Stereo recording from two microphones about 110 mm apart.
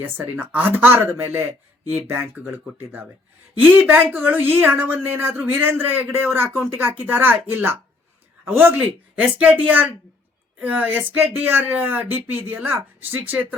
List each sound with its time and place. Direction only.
0.0 s speech: 15° right (ahead or behind)